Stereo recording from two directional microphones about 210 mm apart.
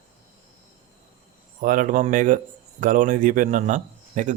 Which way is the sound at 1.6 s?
40° right (ahead or behind).